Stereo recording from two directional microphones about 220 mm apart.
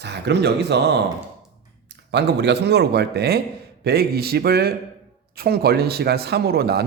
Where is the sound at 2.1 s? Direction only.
50° right (ahead or behind).